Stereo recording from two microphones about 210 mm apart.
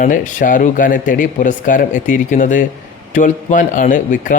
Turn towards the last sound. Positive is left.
turn(degrees=40)  # may be behind; listen again after turning